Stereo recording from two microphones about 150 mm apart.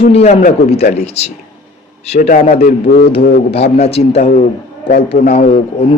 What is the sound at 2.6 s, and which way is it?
Speech, 85° left.